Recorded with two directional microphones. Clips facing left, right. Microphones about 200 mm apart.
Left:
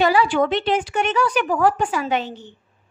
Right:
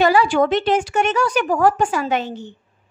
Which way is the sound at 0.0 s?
45° right (ahead or behind).